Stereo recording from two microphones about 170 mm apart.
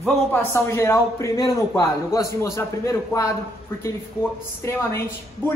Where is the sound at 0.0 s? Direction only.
15° left (ahead or behind).